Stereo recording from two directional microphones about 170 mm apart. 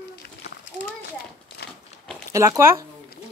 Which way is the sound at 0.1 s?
70° left (ahead or behind).